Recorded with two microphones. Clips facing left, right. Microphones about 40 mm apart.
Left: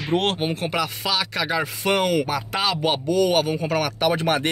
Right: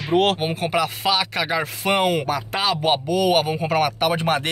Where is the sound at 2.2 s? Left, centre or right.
Centre.